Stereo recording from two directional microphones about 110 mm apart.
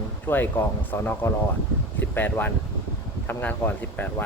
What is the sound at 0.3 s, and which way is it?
Speech, 15° left (ahead or behind).